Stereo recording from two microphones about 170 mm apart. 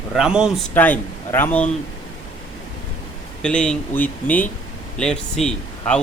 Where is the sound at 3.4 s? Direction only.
5° left (ahead or behind).